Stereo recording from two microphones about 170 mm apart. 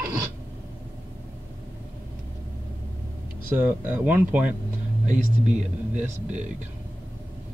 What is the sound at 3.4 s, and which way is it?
Speech, 10° right (ahead or behind).